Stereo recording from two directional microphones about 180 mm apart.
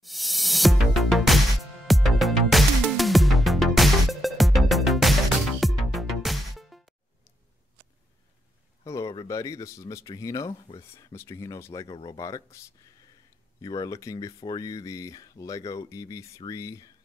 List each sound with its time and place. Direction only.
0.0 s music: centre (ahead or behind)
8.8 s speech: 20° left (ahead or behind)
13.6 s speech: 20° left (ahead or behind)